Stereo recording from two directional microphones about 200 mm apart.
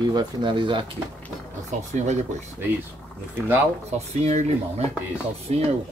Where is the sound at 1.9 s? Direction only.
35° right (ahead or behind).